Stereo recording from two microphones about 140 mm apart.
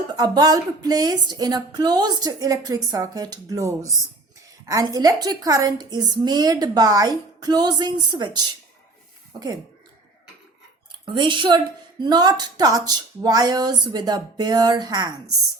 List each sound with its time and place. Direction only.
0.1 s a woman's voice: 30° right (ahead or behind)
11.0 s a woman's voice: 35° right (ahead or behind)